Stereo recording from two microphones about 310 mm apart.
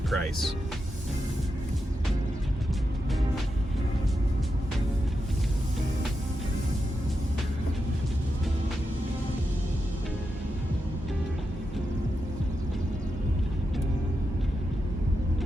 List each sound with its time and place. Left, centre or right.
0.1 s speech: centre